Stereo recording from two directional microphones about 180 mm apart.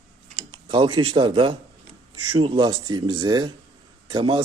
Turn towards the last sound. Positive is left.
turn(degrees=-25)  # may be behind; listen again after turning